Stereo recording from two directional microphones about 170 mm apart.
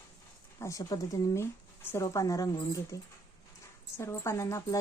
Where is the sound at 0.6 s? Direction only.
20° left (ahead or behind).